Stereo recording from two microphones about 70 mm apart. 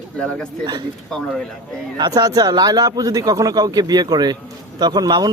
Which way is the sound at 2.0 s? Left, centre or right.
Right.